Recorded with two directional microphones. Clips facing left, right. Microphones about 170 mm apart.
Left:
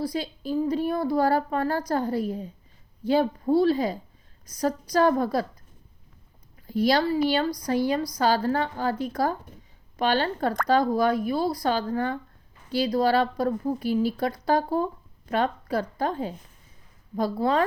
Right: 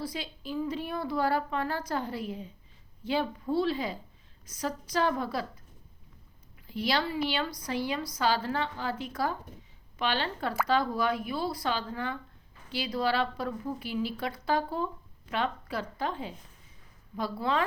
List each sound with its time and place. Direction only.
0.0 s a woman's voice: 40° left (ahead or behind)
6.7 s a woman's voice: 40° left (ahead or behind)